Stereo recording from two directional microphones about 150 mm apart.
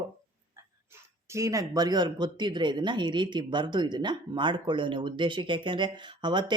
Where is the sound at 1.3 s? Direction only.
20° right (ahead or behind).